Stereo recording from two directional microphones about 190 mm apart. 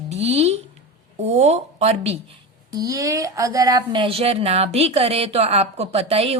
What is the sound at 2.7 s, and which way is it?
Speech, 15° right (ahead or behind).